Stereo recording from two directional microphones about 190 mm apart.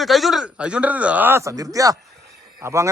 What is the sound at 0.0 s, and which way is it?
A man's voice, centre (ahead or behind).